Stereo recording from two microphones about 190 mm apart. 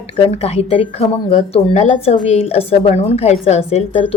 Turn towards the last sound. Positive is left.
turn(degrees=35)  # may be behind; listen again after turning